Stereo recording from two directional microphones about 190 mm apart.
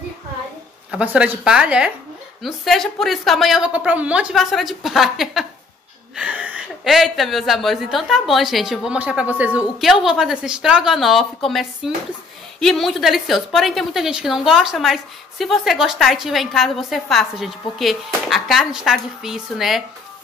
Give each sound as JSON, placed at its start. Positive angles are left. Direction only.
{"t": 0.9, "sound": "a woman's voice", "side_deg": -5}